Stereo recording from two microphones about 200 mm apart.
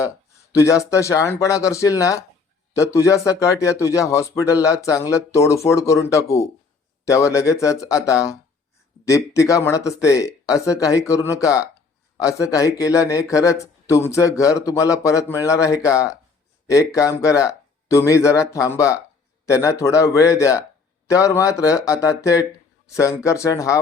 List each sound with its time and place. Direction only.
0.5 s speech: 15° left (ahead or behind)